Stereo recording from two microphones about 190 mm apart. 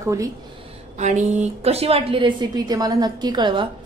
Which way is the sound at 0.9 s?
35° right (ahead or behind).